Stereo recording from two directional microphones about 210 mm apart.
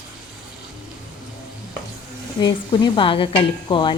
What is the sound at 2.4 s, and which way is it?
Speech, 20° left (ahead or behind).